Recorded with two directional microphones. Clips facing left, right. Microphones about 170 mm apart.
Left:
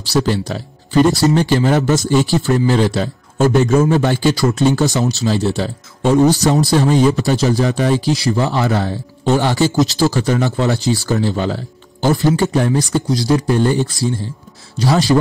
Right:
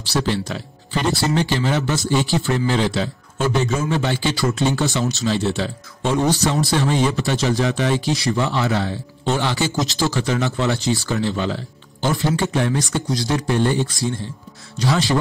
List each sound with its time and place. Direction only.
0.1 s speech: 40° left (ahead or behind)